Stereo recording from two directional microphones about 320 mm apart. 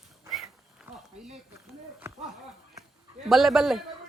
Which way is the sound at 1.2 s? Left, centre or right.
Centre.